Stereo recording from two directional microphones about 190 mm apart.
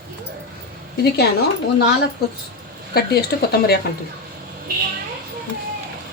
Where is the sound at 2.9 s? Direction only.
55° left (ahead or behind).